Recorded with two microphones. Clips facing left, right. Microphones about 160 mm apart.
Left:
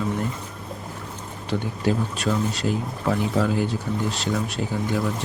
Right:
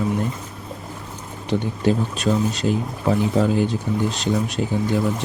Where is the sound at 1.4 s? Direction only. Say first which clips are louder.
Right 4 dB; 20° right (ahead or behind).